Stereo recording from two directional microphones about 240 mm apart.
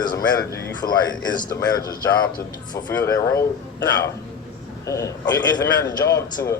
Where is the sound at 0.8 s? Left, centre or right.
Centre.